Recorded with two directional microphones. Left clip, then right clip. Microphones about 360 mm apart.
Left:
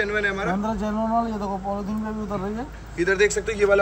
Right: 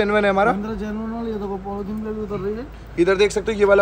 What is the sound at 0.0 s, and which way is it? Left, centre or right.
Speech, centre.